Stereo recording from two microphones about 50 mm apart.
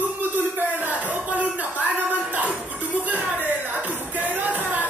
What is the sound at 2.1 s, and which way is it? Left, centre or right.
Music, right.